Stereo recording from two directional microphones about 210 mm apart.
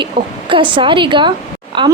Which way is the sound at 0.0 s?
25° right (ahead or behind).